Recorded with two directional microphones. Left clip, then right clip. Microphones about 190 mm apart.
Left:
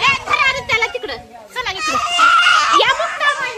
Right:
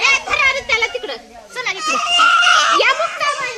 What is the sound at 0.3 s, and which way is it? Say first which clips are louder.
Children playing: even; 20° left (ahead or behind).